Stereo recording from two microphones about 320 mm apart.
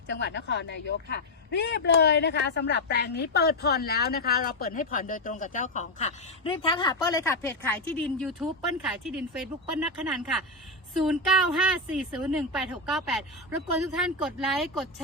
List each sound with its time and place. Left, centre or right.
0.1 s a woman's voice: left; by 15.0 s centre